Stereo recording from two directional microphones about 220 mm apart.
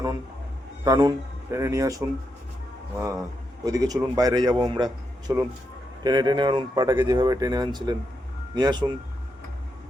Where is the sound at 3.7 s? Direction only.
15° right (ahead or behind).